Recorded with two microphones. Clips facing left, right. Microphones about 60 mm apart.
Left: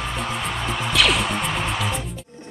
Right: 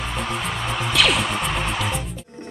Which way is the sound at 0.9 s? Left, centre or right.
Centre.